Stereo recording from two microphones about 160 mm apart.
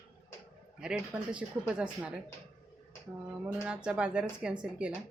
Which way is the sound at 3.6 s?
5° right (ahead or behind).